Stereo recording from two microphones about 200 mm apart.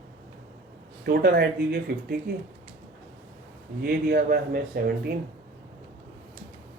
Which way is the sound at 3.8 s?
50° right (ahead or behind).